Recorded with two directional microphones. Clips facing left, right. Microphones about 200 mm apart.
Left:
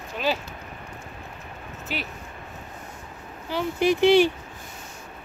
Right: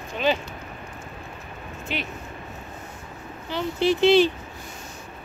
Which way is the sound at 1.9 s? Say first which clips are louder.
Right 1 dB; 5° left (ahead or behind).